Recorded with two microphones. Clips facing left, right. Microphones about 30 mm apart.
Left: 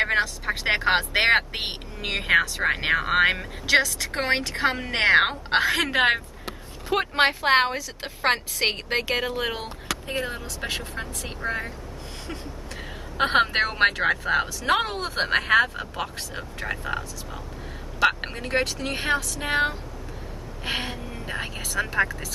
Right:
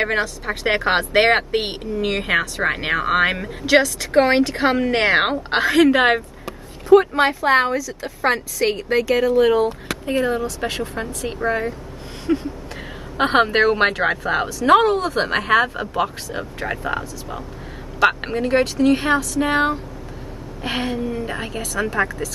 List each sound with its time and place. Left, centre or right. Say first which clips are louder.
0.0 s a woman's voice: right 2 dB; centre
7.0 s a woman's voice: right 4 dB; left
9.4 s speech: right 13 dB; centre
10.0 s a woman's voice: right 13 dB; centre
13.2 s a woman's voice: right 5 dB; centre
18.0 s a woman's voice: right 5 dB; centre